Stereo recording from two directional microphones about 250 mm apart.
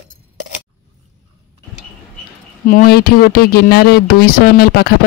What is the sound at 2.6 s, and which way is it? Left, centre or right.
Speech, left.